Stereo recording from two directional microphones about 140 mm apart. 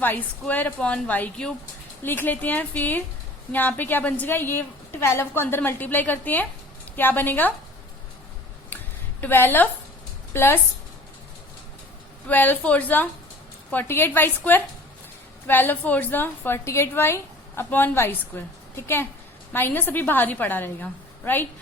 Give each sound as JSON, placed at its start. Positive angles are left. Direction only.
{"t": 0.0, "sound": "a woman's voice", "side_deg": 15}
{"t": 9.2, "sound": "a woman's voice", "side_deg": 15}
{"t": 12.3, "sound": "a woman's voice", "side_deg": 15}